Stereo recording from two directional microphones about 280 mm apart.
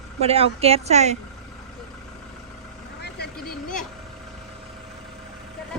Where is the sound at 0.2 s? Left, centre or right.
Right.